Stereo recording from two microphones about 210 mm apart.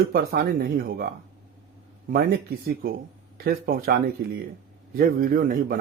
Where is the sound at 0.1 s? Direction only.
45° right (ahead or behind).